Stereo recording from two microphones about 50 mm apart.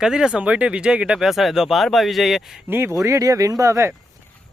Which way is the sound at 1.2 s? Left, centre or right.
Centre.